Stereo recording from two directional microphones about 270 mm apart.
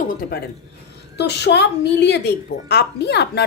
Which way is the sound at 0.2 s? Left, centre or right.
Left.